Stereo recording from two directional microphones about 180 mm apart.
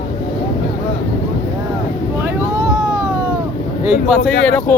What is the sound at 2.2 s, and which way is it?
Boat, 20° right (ahead or behind).